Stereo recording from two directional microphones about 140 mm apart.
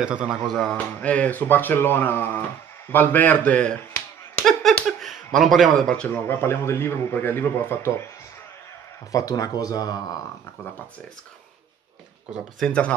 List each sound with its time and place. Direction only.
0.0 s speech: 5° right (ahead or behind); by 8.0 s 15° left (ahead or behind)
9.1 s speech: 25° left (ahead or behind)
12.5 s speech: 5° left (ahead or behind)